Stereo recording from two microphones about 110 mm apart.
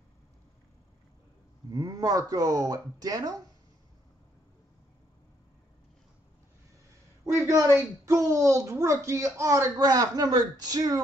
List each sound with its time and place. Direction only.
1.7 s speech: 35° right (ahead or behind)
7.2 s speech: 25° right (ahead or behind)